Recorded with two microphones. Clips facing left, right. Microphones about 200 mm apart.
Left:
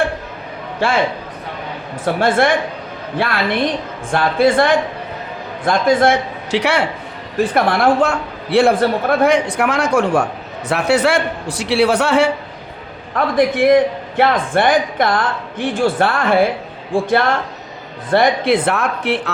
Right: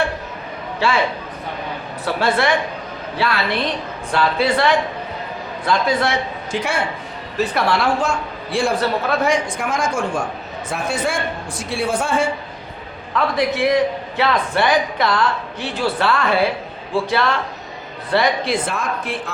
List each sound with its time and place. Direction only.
0.8 s a man's voice: 50° left (ahead or behind)
2.0 s a man's voice: 50° left (ahead or behind)
6.5 s a man's voice: 70° left (ahead or behind)
7.3 s a woman's voice: 50° left (ahead or behind); by 12.3 s 70° left (ahead or behind)
13.1 s a man's voice: 50° left (ahead or behind); by 19.3 s 65° left (ahead or behind)